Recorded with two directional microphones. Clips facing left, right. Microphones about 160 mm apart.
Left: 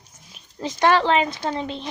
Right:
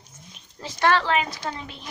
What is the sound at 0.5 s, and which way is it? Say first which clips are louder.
Speech: left 3 dB; 20° left (ahead or behind).